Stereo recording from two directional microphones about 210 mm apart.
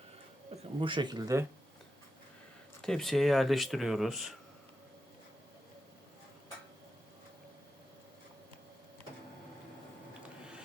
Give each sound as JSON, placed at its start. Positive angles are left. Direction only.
{"t": 0.5, "sound": "speech", "side_deg": -25}
{"t": 2.8, "sound": "speech", "side_deg": 0}